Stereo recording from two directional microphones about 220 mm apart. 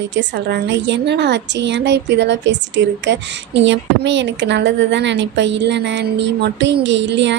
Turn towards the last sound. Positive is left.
turn(degrees=-55)  # may be behind; listen again after turning